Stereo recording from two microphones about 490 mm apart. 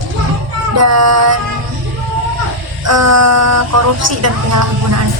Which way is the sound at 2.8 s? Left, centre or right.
Right.